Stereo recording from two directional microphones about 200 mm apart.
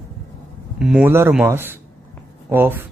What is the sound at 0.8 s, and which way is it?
A man's voice, 5° right (ahead or behind).